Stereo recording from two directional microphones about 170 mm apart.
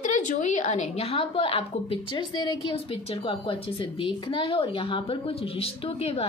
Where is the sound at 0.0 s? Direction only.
45° left (ahead or behind); by 2.8 s 25° left (ahead or behind).